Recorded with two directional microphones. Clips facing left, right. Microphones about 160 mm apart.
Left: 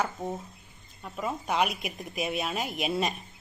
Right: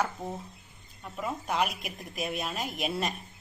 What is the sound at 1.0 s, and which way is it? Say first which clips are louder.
A woman's voice: left 2 dB; centre (ahead or behind).